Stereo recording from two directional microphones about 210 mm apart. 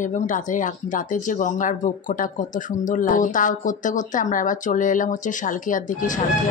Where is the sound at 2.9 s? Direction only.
40° left (ahead or behind).